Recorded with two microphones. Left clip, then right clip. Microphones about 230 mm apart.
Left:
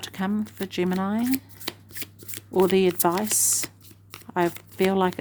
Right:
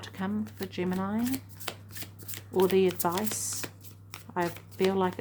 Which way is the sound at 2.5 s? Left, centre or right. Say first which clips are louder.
Left 4 dB; left.